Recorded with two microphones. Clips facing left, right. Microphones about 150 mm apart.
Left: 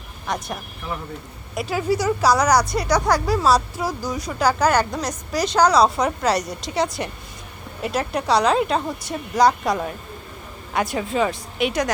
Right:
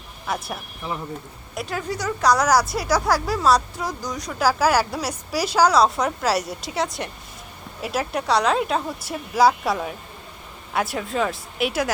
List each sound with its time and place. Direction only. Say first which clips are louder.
0.3 s speech: left 1 dB; 5° right (ahead or behind)